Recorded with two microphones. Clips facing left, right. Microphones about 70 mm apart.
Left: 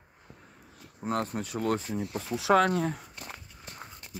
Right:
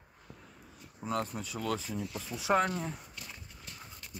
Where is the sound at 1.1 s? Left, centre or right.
Left.